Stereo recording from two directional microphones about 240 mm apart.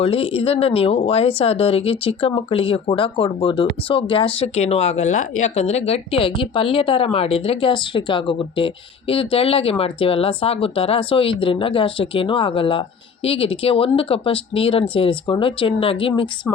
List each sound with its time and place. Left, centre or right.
0.0 s speech: left